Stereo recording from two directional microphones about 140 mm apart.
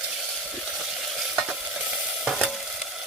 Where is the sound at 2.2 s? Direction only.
5° right (ahead or behind).